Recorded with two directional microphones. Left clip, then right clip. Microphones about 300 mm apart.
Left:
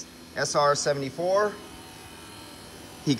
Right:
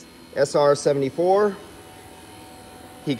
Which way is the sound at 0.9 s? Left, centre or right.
Right.